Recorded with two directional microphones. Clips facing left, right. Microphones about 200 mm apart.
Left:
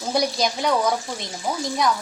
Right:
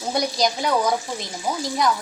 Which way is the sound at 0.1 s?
Centre (ahead or behind).